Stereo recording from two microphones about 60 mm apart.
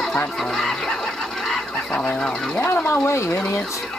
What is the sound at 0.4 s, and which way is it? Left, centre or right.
Fowl, centre.